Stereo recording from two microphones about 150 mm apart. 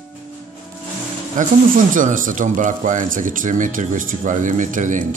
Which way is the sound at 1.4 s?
55° right (ahead or behind).